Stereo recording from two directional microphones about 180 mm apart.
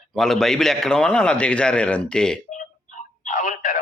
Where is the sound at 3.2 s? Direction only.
45° left (ahead or behind).